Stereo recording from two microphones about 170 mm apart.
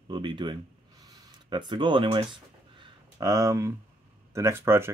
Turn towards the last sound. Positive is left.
turn(degrees=-15)  # may be behind; listen again after turning